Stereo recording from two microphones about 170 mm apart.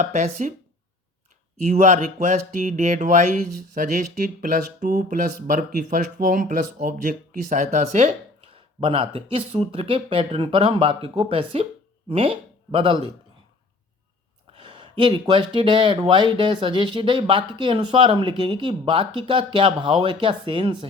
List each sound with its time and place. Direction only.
0.0 s speech: 45° right (ahead or behind)
1.6 s speech: 45° right (ahead or behind)
8.5 s speech: 30° right (ahead or behind)
14.5 s speech: 30° right (ahead or behind)